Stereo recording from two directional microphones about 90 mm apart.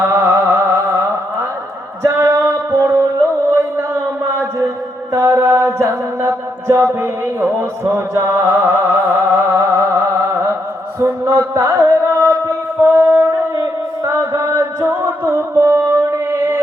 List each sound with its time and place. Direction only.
0.0 s carnatic music: 30° right (ahead or behind)
2.0 s music: 30° right (ahead or behind)
3.5 s a sound: 30° right (ahead or behind)
5.1 s chant: 35° right (ahead or behind)